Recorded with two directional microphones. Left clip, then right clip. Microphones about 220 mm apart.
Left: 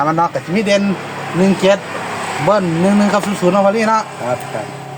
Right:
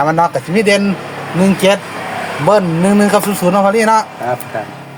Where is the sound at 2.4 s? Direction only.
45° right (ahead or behind).